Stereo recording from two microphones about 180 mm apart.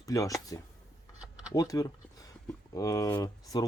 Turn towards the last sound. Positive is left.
turn(degrees=20)  # may be behind; listen again after turning